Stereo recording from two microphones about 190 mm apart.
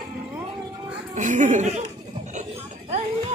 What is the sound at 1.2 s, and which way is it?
Speech, 40° right (ahead or behind).